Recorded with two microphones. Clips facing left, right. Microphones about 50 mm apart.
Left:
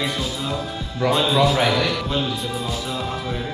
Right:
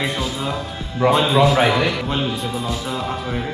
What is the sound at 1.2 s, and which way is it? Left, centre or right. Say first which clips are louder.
Speech: even; centre.